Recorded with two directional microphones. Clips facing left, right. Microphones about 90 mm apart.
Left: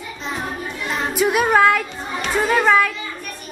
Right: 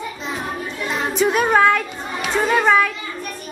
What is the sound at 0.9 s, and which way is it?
Chatter, 5° left (ahead or behind).